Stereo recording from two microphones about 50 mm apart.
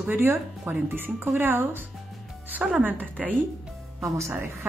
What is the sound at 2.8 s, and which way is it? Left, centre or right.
Speech, right.